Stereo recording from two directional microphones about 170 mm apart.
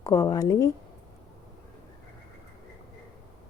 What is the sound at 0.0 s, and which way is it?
Speech, 20° left (ahead or behind).